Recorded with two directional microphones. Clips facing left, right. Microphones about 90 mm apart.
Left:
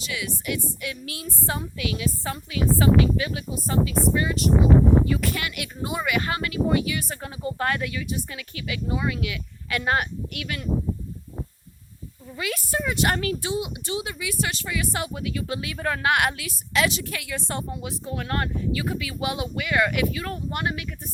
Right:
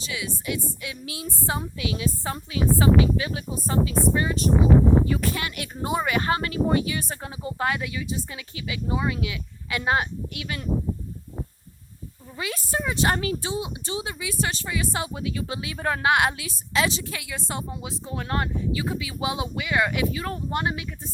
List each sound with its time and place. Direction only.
0.1 s speech: 25° right (ahead or behind)
12.4 s speech: 25° right (ahead or behind)